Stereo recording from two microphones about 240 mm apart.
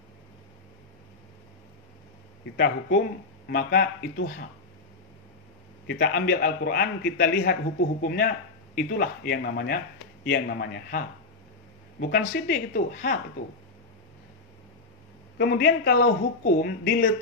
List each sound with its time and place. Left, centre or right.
2.5 s speech: left
5.9 s a man's voice: left
15.3 s speech: left